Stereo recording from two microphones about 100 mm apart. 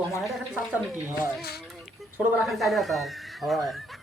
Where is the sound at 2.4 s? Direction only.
Centre (ahead or behind).